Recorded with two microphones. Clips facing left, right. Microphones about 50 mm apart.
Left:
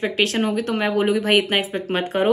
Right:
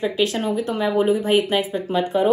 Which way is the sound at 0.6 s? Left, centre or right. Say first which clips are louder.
Even; left.